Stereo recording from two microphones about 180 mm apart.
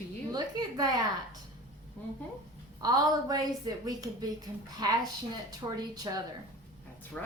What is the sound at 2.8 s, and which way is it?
A woman's voice, 20° right (ahead or behind).